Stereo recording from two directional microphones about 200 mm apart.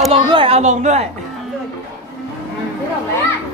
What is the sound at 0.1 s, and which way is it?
Speech, 30° right (ahead or behind).